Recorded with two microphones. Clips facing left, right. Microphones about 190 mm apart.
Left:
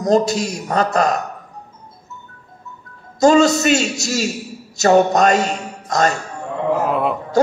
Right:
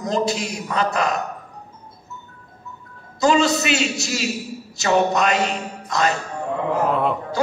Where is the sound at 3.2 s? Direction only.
45° left (ahead or behind).